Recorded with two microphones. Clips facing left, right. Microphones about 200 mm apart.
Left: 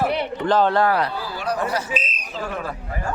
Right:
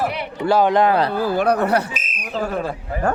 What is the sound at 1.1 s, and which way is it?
Speech, 55° right (ahead or behind).